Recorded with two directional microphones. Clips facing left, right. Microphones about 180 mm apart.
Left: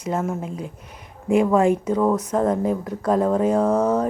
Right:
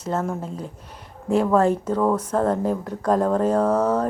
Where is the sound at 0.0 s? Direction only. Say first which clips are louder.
Left 1 dB; 10° left (ahead or behind).